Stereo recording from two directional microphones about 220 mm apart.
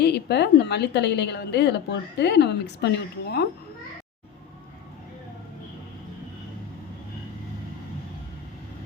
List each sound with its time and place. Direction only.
0.0 s a woman's voice: 50° left (ahead or behind)